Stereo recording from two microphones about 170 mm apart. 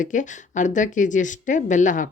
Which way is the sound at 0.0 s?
50° left (ahead or behind).